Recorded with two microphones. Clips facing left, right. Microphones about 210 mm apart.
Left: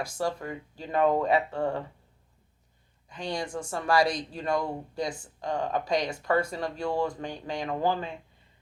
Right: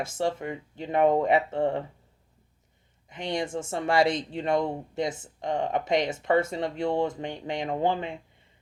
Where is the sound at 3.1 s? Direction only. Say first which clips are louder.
Right 3 dB; 20° right (ahead or behind).